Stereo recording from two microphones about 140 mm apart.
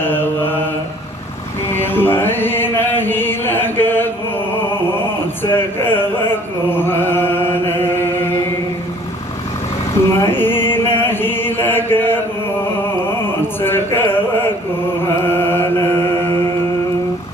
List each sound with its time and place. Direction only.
0.0 s mantra: 15° left (ahead or behind)
1.7 s chant: 15° left (ahead or behind)
5.4 s a sound: 15° left (ahead or behind)
6.7 s chant: 15° left (ahead or behind)
10.2 s chant: 15° left (ahead or behind)
13.6 s a sound: 15° left (ahead or behind)
15.2 s chant: 15° left (ahead or behind)